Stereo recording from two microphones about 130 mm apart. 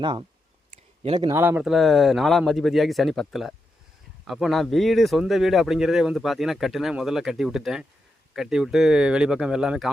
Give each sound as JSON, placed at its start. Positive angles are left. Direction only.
{"t": 0.0, "sound": "speech", "side_deg": -35}
{"t": 0.7, "sound": "a sound", "side_deg": -55}
{"t": 1.3, "sound": "speech", "side_deg": -15}
{"t": 1.6, "sound": "speech", "side_deg": 0}